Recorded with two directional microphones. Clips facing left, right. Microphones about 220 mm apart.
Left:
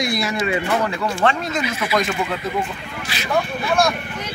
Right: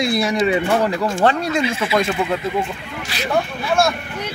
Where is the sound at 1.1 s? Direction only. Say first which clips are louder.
Right 1 dB; 50° right (ahead or behind).